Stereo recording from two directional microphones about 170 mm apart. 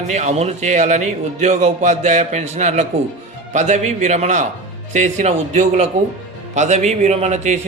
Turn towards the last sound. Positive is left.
turn(degrees=-40)  # may be behind; listen again after turning